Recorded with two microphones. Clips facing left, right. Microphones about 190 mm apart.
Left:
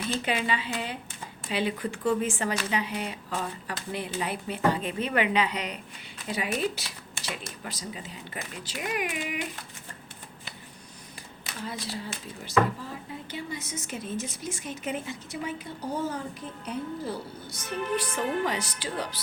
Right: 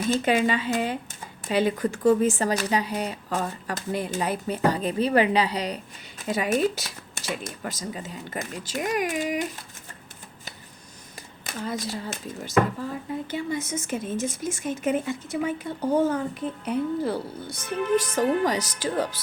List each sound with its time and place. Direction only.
0.0 s speech: 45° right (ahead or behind)
6.2 s speech: 45° right (ahead or behind)
11.4 s a woman's voice: 45° right (ahead or behind); by 17.6 s 60° right (ahead or behind)
17.9 s speech: 45° right (ahead or behind)